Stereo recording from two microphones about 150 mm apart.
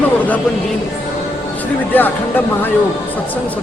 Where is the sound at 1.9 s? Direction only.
10° left (ahead or behind).